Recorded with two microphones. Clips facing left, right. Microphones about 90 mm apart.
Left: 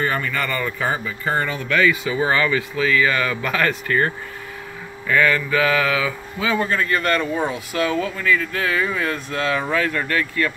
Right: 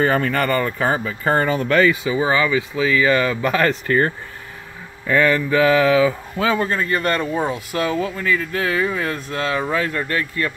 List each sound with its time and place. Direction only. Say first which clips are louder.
0.0 s speech: right 5 dB; 75° right (ahead or behind)
0.4 s speech: right 4 dB; 40° right (ahead or behind)
1.2 s speech: right 5 dB; 50° right (ahead or behind)
2.0 s speech: right 1 dB; 15° right (ahead or behind)